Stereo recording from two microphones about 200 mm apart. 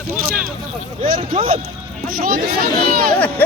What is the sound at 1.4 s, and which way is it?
Speech, 30° right (ahead or behind).